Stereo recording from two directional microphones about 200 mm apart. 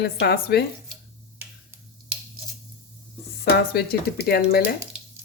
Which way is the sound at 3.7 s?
50° left (ahead or behind).